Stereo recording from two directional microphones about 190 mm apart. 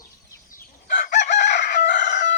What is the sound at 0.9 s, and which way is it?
Chicken, 40° left (ahead or behind).